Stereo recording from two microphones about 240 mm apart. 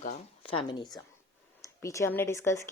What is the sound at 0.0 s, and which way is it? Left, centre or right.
Speech, left.